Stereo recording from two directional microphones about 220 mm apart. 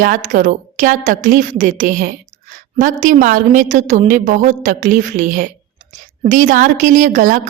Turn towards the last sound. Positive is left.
turn(degrees=-35)  # may be behind; listen again after turning